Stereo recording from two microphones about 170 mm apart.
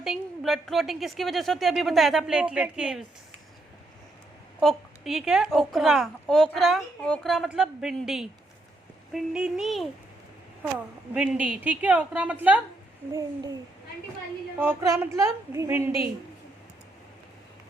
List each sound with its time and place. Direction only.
0.0 s a woman's voice: centre (ahead or behind)
4.6 s a woman's voice: centre (ahead or behind)
14.8 s a woman's voice: 15° right (ahead or behind)